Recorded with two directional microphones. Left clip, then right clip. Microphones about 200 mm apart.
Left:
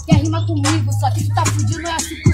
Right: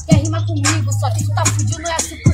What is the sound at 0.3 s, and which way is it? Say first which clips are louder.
Speech: even; 10° right (ahead or behind).